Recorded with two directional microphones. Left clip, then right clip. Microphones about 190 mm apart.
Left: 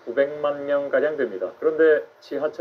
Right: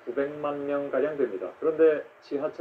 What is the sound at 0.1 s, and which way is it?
A man's voice, 35° left (ahead or behind).